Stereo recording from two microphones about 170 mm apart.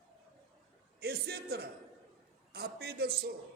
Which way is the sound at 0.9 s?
65° right (ahead or behind).